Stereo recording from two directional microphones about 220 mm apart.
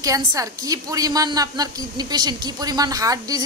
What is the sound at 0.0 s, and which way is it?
Speech, 15° right (ahead or behind).